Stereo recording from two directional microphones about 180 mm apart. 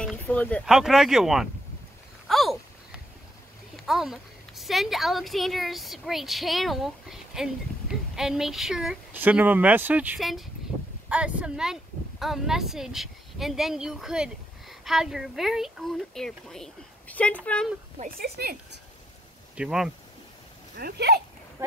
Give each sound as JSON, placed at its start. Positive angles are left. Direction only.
{"t": 0.0, "sound": "boat", "side_deg": 5}
{"t": 0.7, "sound": "a woman's voice", "side_deg": 0}
{"t": 2.2, "sound": "a sound", "side_deg": 0}
{"t": 3.8, "sound": "a woman's voice", "side_deg": 0}
{"t": 17.9, "sound": "a woman's voice", "side_deg": -55}
{"t": 19.5, "sound": "speech", "side_deg": -5}
{"t": 20.7, "sound": "a woman's voice", "side_deg": -65}
{"t": 21.6, "sound": "a sound", "side_deg": -15}